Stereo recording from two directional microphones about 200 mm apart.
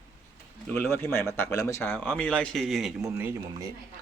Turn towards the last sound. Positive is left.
turn(degrees=-15)  # may be behind; listen again after turning